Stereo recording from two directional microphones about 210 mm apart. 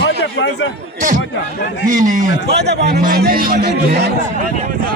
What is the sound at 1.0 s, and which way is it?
A man's voice, 35° right (ahead or behind).